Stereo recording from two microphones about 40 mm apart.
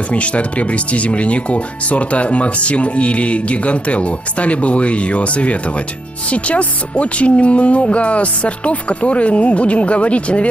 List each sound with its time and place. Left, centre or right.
0.1 s speech: left